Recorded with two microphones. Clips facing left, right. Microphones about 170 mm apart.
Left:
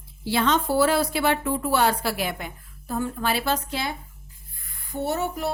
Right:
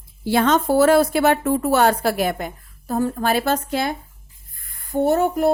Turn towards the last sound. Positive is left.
turn(degrees=-50)  # may be behind; listen again after turning